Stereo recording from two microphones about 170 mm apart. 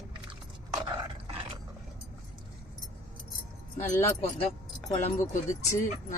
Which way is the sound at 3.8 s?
35° left (ahead or behind).